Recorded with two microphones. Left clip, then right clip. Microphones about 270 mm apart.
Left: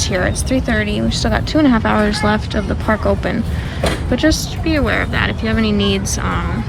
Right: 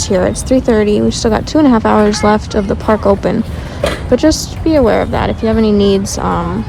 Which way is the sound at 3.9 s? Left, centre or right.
Centre.